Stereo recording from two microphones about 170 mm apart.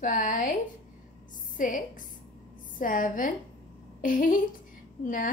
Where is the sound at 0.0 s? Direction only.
50° left (ahead or behind).